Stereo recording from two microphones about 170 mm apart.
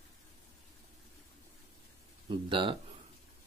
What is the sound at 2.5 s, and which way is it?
Speech, 30° right (ahead or behind).